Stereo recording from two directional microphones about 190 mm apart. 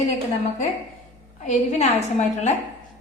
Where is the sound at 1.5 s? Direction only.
35° left (ahead or behind).